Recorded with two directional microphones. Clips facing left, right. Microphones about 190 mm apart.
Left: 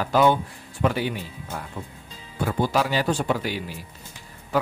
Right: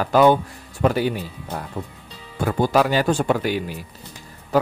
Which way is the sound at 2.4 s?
50° right (ahead or behind).